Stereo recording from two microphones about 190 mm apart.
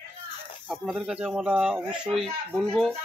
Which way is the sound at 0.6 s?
5° right (ahead or behind).